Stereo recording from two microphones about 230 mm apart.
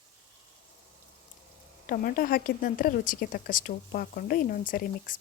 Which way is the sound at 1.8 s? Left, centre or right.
Left.